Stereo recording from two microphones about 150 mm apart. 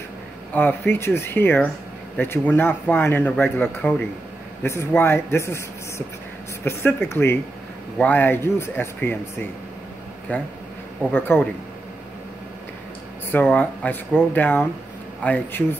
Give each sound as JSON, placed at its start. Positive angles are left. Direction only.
{"t": 0.5, "sound": "speech", "side_deg": 15}
{"t": 10.3, "sound": "speech", "side_deg": 10}
{"t": 13.3, "sound": "speech", "side_deg": 10}